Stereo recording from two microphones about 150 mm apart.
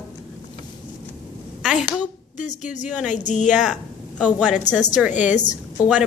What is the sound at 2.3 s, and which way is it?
A woman's voice, 55° left (ahead or behind).